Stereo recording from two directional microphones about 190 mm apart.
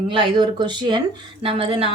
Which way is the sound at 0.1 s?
25° right (ahead or behind).